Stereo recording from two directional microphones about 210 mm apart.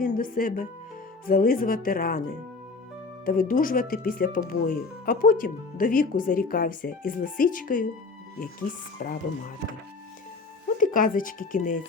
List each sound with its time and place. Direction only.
0.0 s speech: 40° left (ahead or behind)
3.2 s speech: 40° left (ahead or behind)
9.0 s speech: 35° left (ahead or behind)
10.8 s speech: 40° left (ahead or behind)